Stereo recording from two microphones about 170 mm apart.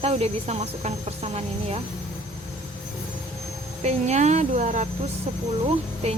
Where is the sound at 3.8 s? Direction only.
40° right (ahead or behind).